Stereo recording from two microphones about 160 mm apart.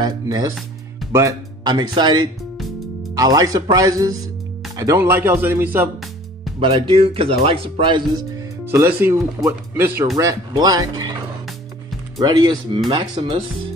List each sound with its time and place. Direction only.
0.0 s speech: 25° right (ahead or behind)
6.6 s speech: 35° right (ahead or behind)
8.6 s speech: 15° right (ahead or behind)
12.2 s speech: 25° right (ahead or behind)